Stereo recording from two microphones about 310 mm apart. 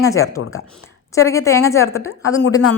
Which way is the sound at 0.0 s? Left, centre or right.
Centre.